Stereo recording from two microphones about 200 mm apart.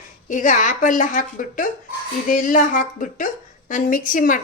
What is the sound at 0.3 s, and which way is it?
A woman's voice, 40° left (ahead or behind).